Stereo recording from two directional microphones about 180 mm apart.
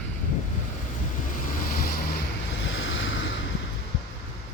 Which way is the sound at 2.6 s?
90° left.